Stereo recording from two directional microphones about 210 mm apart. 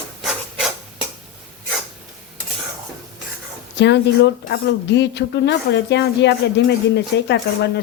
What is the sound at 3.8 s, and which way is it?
Speech, 55° left (ahead or behind).